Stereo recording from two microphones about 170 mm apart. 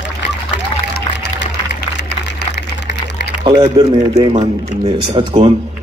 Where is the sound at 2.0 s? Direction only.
80° left.